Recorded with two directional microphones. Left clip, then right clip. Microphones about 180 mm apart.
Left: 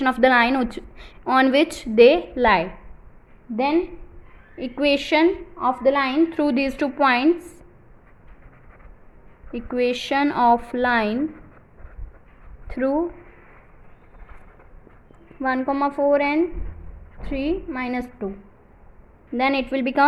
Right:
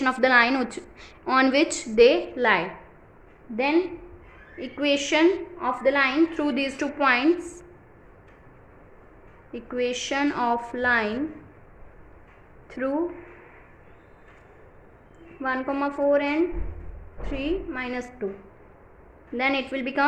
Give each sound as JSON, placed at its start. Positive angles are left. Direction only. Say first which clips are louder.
{"t": 0.0, "sound": "a woman's voice", "louder": "left 3 dB", "side_deg": 30}
{"t": 9.5, "sound": "a woman's voice", "louder": "left 5 dB", "side_deg": 30}
{"t": 12.6, "sound": "speech", "louder": "left 5 dB", "side_deg": 30}
{"t": 15.4, "sound": "a woman's voice", "louder": "left 5 dB", "side_deg": 25}
{"t": 19.4, "sound": "a woman's voice", "louder": "left 4 dB", "side_deg": 35}